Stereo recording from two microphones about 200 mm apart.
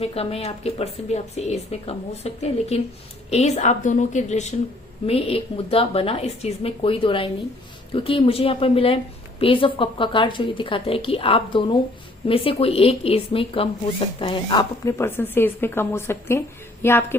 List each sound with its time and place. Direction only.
0.0 s a woman's voice: 30° left (ahead or behind); by 17.2 s 10° left (ahead or behind)